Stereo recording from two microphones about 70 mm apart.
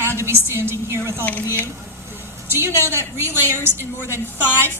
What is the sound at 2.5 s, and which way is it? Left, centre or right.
Speech, right.